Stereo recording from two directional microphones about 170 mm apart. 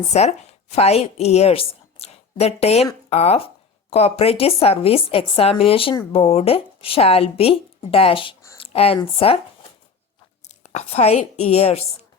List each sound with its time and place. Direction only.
0.1 s a woman's voice: 40° left (ahead or behind)
8.5 s a sound: 35° left (ahead or behind)
9.1 s speech: 35° left (ahead or behind)
10.6 s speech: 40° left (ahead or behind)